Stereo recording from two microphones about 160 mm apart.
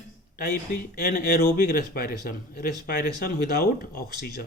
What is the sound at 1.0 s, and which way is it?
Speech, 70° left (ahead or behind).